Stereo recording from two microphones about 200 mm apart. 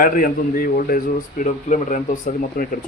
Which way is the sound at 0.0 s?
45° left (ahead or behind).